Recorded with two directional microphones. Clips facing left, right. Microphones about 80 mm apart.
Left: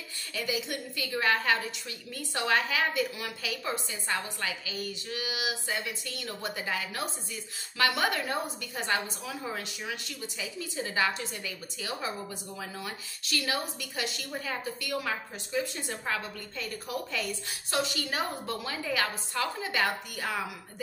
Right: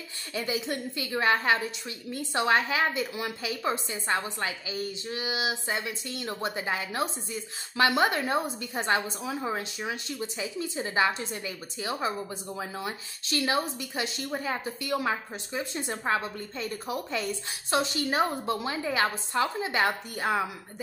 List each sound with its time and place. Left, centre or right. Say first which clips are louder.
0.3 s a woman's voice: right 3 dB; right